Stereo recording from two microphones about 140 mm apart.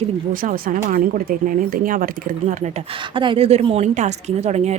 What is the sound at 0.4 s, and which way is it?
Speech, 90° right.